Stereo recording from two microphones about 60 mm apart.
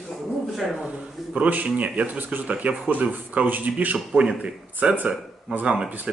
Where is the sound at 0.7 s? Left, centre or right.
Centre.